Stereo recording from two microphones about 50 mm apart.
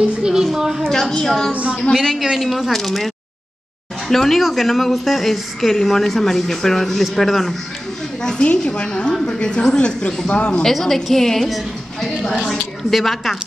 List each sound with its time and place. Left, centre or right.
0.2 s a woman's voice: centre
1.1 s a woman's voice: centre
1.5 s a woman's voice: right
2.2 s speech: centre
4.1 s a woman's voice: centre
10.6 s a woman's voice: centre